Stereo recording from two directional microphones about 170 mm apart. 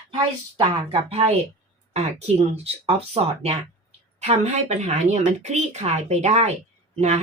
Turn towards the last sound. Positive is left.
turn(degrees=-40)  # may be behind; listen again after turning